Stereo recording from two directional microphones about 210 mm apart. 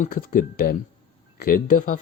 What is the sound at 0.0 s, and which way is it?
Speech, 40° left (ahead or behind).